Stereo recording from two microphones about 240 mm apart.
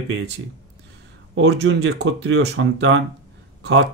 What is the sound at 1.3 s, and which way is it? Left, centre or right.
Speech, right.